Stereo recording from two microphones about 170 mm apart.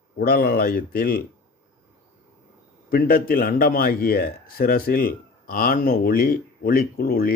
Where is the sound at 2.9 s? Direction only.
60° left (ahead or behind).